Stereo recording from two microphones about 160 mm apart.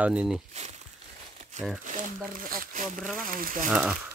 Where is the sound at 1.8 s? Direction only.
55° right (ahead or behind).